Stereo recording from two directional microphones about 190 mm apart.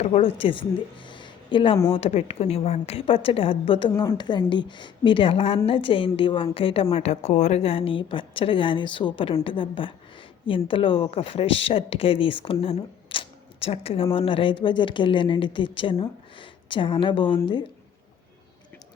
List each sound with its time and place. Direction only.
0.0 s speech: 35° left (ahead or behind)
1.0 s a sound: 25° left (ahead or behind)
1.9 s speech: 30° left (ahead or behind)